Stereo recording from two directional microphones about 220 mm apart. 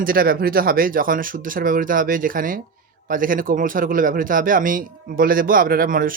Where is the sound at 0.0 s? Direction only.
40° right (ahead or behind).